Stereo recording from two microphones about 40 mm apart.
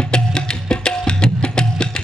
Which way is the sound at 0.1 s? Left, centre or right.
Left.